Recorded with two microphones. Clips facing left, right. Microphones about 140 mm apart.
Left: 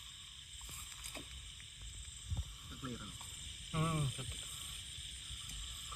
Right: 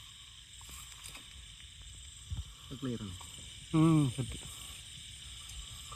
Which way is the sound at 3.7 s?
25° right (ahead or behind).